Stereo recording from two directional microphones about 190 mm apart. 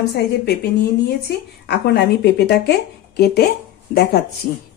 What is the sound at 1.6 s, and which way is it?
A woman's voice, 60° left (ahead or behind).